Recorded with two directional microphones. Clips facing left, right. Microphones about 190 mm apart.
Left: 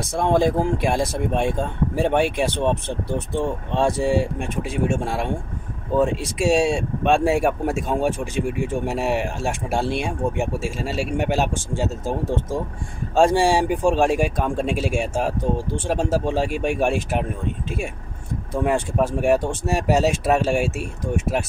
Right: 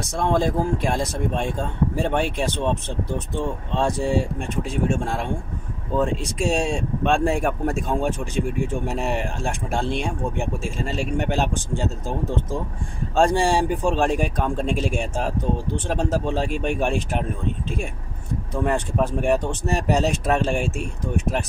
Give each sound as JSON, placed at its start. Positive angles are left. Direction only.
{"t": 0.1, "sound": "speech", "side_deg": 15}